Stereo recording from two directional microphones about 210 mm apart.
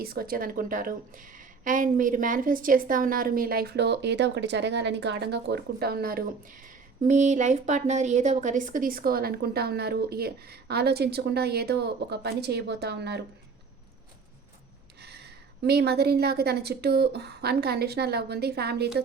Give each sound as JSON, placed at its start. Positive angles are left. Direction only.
{"t": 0.0, "sound": "a woman's voice", "side_deg": -45}
{"t": 15.0, "sound": "a woman's voice", "side_deg": -50}